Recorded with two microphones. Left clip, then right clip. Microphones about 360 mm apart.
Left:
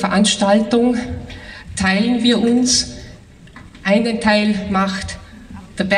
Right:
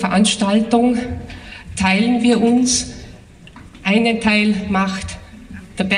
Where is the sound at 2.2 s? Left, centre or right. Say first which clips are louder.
Even; centre.